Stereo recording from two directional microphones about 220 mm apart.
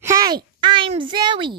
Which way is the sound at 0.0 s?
15° right (ahead or behind).